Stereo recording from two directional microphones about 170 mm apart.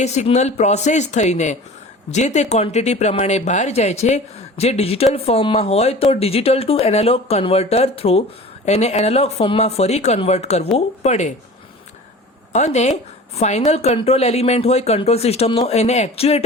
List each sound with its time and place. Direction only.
0.0 s speech: 40° left (ahead or behind)
12.5 s speech: 40° left (ahead or behind)